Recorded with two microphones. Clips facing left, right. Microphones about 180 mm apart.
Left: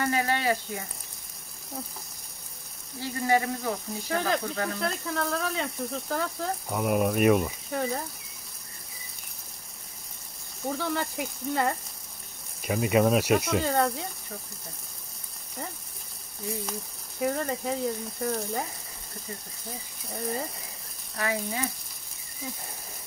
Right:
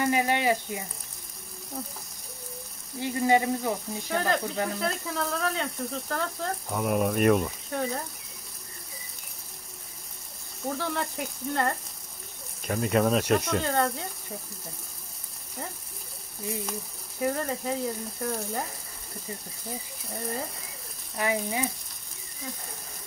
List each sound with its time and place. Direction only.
0.0 s speech: 15° right (ahead or behind)
3.0 s frying: 20° right (ahead or behind)
4.1 s speech: centre (ahead or behind)
10.7 s speech: centre (ahead or behind)
17.2 s speech: centre (ahead or behind)
20.1 s speech: centre (ahead or behind)
21.2 s frying: 20° right (ahead or behind)